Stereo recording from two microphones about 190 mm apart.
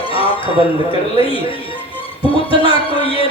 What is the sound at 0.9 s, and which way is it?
Speech, 30° left (ahead or behind).